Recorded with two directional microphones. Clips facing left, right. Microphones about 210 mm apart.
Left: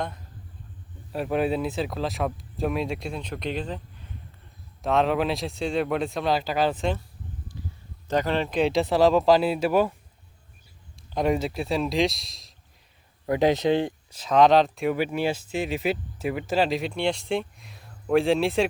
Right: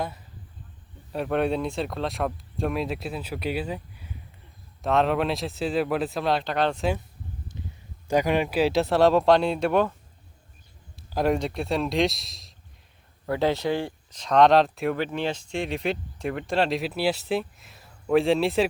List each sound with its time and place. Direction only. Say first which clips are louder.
1.1 s speech: even; centre (ahead or behind)
7.6 s a sound: left 1 dB; 20° right (ahead or behind)
8.0 s speech: right 2 dB; 10° right (ahead or behind); by 9.9 s 5° left (ahead or behind)
10.9 s a man's voice: even; centre (ahead or behind)
13.2 s speech: left 3 dB; 15° left (ahead or behind)
14.1 s speech: even; 5° left (ahead or behind)